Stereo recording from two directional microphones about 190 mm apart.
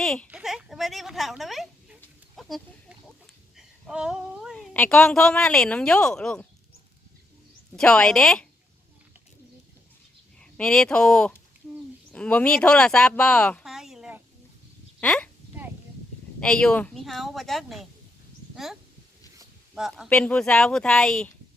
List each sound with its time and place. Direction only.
0.0 s a woman's voice: centre (ahead or behind)
2.3 s pig: centre (ahead or behind)
3.6 s a sound: 5° right (ahead or behind)
4.5 s a woman's voice: 10° left (ahead or behind)
7.8 s a woman's voice: 5° left (ahead or behind)
10.4 s speech: 5° left (ahead or behind)
16.4 s a woman's voice: 5° left (ahead or behind)